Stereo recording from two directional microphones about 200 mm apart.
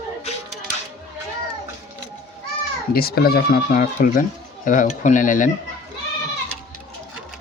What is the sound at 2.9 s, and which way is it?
Speech, 50° left (ahead or behind).